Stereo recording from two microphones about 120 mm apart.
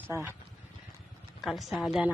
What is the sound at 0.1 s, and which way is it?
Speech, 20° right (ahead or behind).